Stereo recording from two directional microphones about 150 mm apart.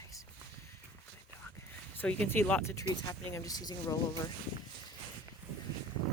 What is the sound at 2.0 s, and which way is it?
Speech, 10° left (ahead or behind).